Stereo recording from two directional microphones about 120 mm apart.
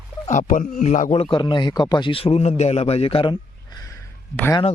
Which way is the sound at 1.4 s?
40° left (ahead or behind).